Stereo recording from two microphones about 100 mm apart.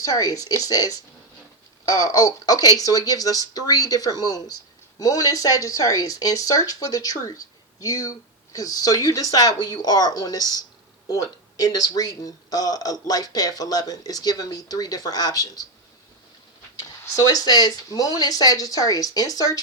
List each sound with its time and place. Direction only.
0.0 s speech: 35° left (ahead or behind)
11.6 s speech: 40° left (ahead or behind)
17.1 s speech: 40° left (ahead or behind)